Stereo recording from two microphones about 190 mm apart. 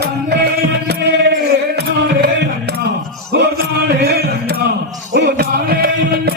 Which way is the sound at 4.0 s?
55° right (ahead or behind).